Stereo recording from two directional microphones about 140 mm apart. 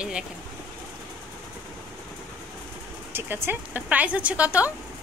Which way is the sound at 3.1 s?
15° right (ahead or behind).